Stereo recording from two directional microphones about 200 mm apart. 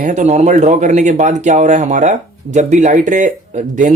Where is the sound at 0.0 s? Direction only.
35° right (ahead or behind).